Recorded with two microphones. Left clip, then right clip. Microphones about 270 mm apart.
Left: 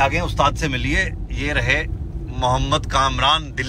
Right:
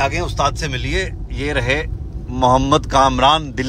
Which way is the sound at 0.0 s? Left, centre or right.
Centre.